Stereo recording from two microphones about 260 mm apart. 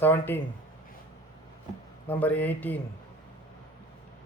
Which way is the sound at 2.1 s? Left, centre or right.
Centre.